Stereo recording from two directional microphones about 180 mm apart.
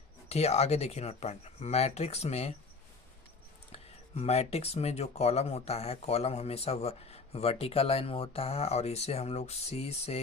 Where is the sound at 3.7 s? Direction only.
35° left (ahead or behind).